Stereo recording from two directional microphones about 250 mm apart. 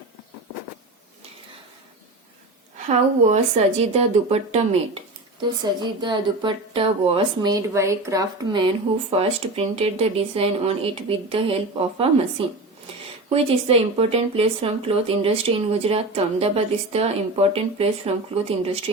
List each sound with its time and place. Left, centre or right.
3.2 s a woman's voice: right
13.3 s a woman's voice: right